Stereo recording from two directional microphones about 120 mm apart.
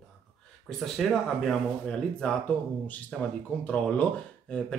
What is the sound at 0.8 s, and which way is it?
Speech, centre (ahead or behind).